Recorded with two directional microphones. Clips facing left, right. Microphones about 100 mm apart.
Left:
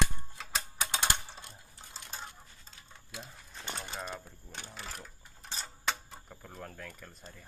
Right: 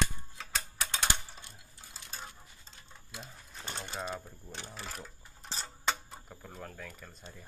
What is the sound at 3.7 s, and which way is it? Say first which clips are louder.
Sewing machine: right 3 dB; centre (ahead or behind).